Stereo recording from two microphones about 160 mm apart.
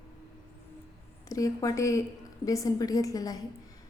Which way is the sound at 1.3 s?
20° left (ahead or behind).